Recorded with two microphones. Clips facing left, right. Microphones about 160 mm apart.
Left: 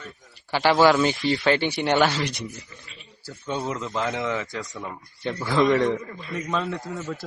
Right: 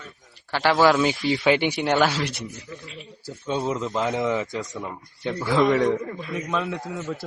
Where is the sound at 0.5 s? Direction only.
Centre (ahead or behind).